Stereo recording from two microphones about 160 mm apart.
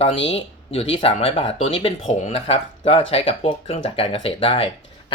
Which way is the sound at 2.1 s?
50° left (ahead or behind).